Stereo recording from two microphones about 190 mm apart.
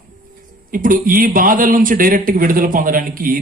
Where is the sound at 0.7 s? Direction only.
45° right (ahead or behind).